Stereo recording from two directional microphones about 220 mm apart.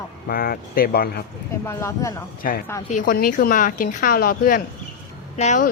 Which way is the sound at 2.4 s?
40° left (ahead or behind).